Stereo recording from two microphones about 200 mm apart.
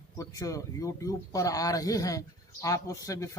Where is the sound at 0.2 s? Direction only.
15° left (ahead or behind).